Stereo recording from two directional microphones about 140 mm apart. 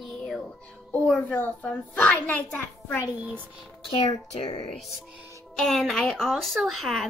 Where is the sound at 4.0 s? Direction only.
30° left (ahead or behind).